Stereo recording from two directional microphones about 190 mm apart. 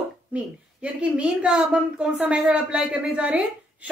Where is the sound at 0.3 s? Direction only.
5° right (ahead or behind).